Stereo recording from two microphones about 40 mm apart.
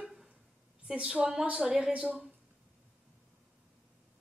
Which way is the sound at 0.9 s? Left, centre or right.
Right.